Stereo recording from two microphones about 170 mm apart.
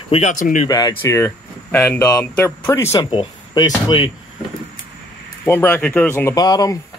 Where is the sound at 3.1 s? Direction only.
30° left (ahead or behind).